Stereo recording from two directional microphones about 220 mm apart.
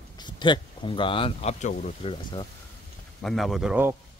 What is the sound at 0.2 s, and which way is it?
Speech, 20° left (ahead or behind).